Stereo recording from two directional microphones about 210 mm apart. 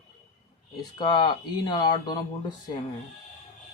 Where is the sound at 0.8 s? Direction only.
20° left (ahead or behind).